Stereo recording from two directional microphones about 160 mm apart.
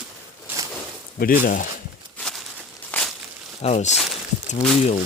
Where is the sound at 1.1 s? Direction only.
65° left (ahead or behind).